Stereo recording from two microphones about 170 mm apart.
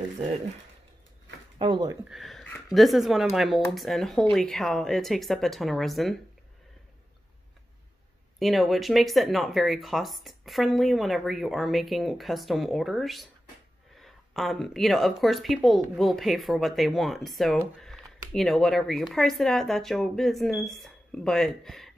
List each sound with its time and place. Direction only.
1.6 s speech: 25° right (ahead or behind)
2.0 s speech: centre (ahead or behind)
8.4 s speech: centre (ahead or behind)